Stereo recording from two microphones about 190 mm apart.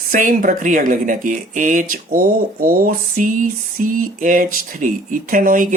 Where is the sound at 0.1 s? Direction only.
45° right (ahead or behind).